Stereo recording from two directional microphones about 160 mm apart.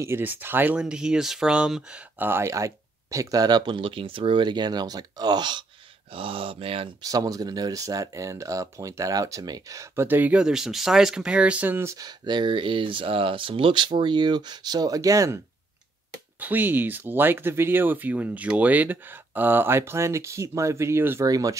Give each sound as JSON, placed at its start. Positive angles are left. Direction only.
{"t": 0.0, "sound": "speech", "side_deg": -15}
{"t": 7.1, "sound": "speech", "side_deg": -20}